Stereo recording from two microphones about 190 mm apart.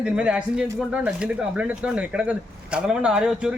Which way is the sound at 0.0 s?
5° right (ahead or behind).